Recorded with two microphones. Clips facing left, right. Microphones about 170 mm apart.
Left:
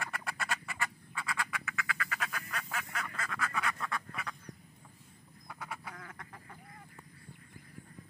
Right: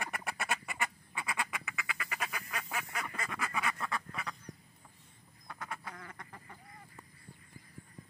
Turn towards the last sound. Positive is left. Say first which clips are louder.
# even
turn(degrees=0)  # may be behind; listen again after turning